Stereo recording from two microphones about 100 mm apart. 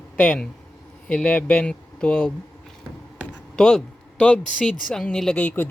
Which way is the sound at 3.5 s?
5° left (ahead or behind).